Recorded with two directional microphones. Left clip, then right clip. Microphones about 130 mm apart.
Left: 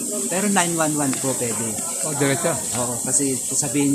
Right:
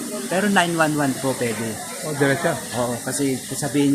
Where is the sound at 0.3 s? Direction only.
15° right (ahead or behind).